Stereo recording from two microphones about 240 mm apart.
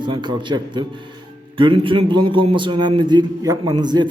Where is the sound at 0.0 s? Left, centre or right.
Centre.